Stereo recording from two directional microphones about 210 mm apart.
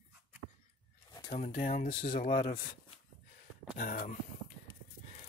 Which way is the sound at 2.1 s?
25° left (ahead or behind).